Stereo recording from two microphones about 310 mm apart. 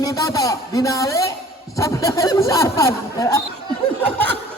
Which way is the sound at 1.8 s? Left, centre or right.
Centre.